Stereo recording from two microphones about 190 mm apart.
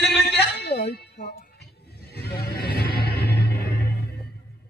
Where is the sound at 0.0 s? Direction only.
60° left (ahead or behind).